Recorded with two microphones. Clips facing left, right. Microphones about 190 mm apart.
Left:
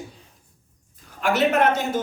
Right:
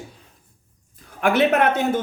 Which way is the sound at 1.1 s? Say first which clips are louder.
Right 2 dB; 55° right (ahead or behind).